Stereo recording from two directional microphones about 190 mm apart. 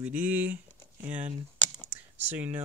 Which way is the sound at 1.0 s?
40° right (ahead or behind).